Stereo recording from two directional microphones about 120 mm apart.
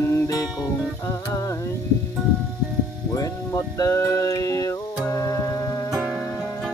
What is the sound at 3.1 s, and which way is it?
Music, 30° left (ahead or behind).